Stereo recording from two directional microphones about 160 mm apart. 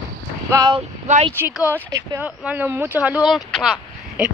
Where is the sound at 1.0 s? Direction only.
45° right (ahead or behind).